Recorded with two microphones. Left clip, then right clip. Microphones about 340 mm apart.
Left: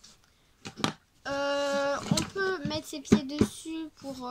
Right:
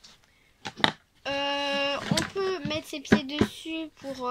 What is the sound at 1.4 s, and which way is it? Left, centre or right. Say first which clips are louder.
Speech: even; centre.